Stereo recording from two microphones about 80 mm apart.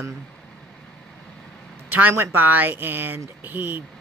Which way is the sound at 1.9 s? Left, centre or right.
Right.